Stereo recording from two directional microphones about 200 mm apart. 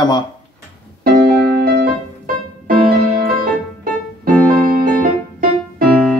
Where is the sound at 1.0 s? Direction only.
50° right (ahead or behind).